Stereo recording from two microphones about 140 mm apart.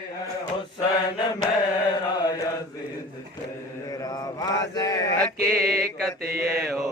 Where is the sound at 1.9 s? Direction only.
30° left (ahead or behind).